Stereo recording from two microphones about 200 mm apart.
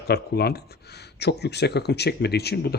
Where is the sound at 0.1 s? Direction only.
55° left (ahead or behind).